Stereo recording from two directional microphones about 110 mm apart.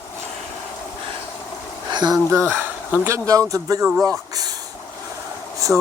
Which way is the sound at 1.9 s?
40° right (ahead or behind).